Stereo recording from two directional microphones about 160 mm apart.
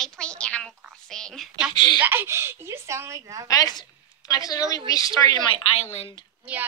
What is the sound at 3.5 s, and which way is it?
A woman's voice, 25° left (ahead or behind).